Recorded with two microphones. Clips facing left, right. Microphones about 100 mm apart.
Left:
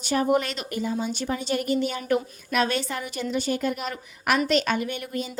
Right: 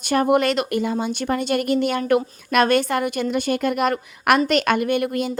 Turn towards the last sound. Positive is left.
turn(degrees=-65)  # may be behind; listen again after turning